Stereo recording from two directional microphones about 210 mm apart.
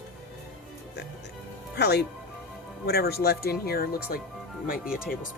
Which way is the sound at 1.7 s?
50° left (ahead or behind).